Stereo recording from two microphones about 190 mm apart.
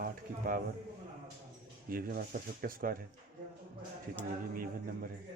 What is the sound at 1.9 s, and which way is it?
Speech, 50° right (ahead or behind).